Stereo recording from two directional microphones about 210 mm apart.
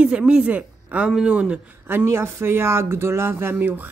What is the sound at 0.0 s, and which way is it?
A woman's voice, 5° right (ahead or behind).